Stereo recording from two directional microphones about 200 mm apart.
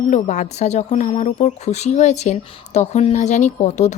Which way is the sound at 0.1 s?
35° left (ahead or behind).